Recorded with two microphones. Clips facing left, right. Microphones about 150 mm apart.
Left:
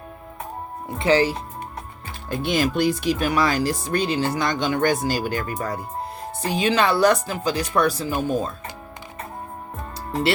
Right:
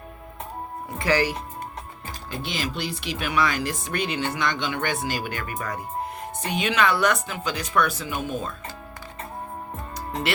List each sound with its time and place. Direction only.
0.9 s speech: 25° left (ahead or behind)
2.3 s speech: 50° left (ahead or behind); by 8.5 s 35° left (ahead or behind)